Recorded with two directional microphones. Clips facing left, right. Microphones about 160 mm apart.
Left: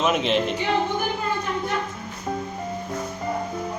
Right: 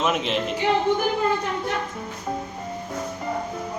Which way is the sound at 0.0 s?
Centre (ahead or behind).